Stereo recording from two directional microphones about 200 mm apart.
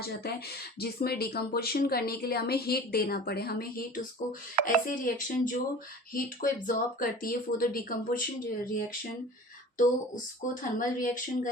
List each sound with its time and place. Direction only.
0.0 s speech: 50° left (ahead or behind)
10.4 s speech: 40° left (ahead or behind)